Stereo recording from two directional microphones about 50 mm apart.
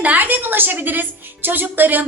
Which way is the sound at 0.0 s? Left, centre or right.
Right.